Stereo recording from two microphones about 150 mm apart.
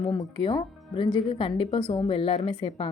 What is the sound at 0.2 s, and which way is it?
A woman's voice, 30° left (ahead or behind).